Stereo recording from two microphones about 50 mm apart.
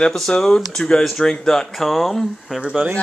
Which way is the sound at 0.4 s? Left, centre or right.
Centre.